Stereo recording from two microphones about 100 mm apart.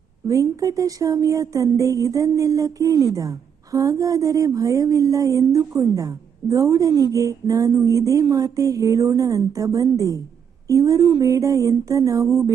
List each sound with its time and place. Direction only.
0.3 s a woman's voice: 35° right (ahead or behind)